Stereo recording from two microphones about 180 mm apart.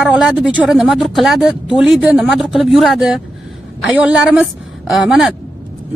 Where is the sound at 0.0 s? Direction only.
5° right (ahead or behind).